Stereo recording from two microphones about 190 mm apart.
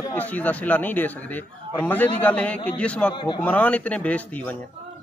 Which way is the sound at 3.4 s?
10° left (ahead or behind).